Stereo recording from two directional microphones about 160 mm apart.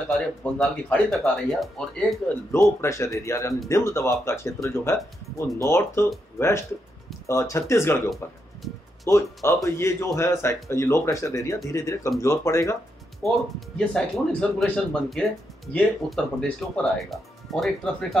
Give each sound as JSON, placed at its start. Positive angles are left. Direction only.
{"t": 0.1, "sound": "speech", "side_deg": 5}
{"t": 8.6, "sound": "speech", "side_deg": 0}
{"t": 9.1, "sound": "speech", "side_deg": 20}
{"t": 13.7, "sound": "speech", "side_deg": 0}